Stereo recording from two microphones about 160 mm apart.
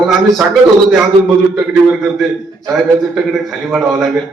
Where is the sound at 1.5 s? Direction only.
Centre (ahead or behind).